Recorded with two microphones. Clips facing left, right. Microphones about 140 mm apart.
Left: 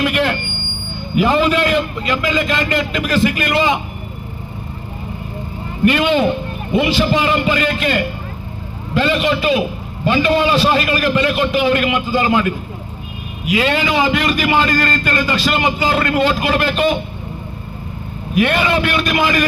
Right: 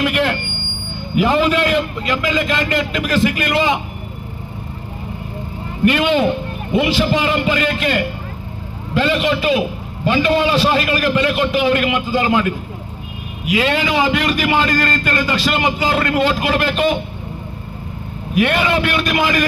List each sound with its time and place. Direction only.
0.0 s a sound: 35° left (ahead or behind)
1.1 s a man's voice: 35° left (ahead or behind)
5.8 s a man's voice: 35° left (ahead or behind)
18.3 s a man's voice: 35° left (ahead or behind)